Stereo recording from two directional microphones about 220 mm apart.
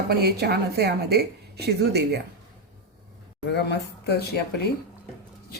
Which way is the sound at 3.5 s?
50° left (ahead or behind).